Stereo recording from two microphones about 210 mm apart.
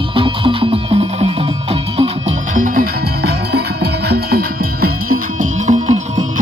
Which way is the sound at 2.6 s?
40° right (ahead or behind).